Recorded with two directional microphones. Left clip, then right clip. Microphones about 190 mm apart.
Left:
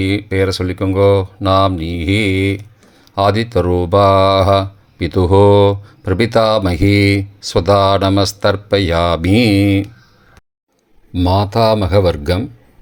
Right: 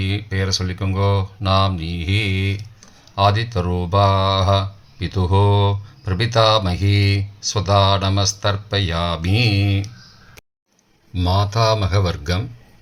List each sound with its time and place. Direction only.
0.0 s speech: 45° left (ahead or behind)
11.1 s speech: 35° left (ahead or behind)